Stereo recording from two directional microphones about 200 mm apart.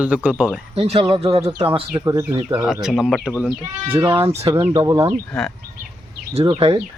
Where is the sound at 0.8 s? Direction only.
30° right (ahead or behind).